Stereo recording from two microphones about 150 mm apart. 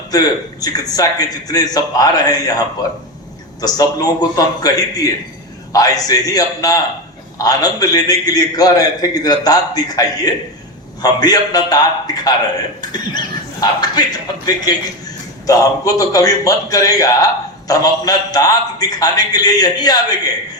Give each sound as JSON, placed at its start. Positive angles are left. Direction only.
{"t": 0.1, "sound": "a man's voice", "side_deg": 25}
{"t": 3.6, "sound": "a man's voice", "side_deg": 25}